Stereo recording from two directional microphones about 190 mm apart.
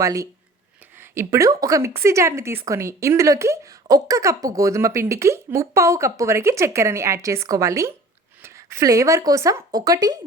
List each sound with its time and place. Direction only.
0.0 s a woman's voice: 15° right (ahead or behind)